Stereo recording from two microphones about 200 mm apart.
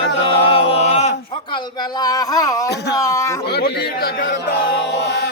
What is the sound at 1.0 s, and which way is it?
Speech, 35° left (ahead or behind).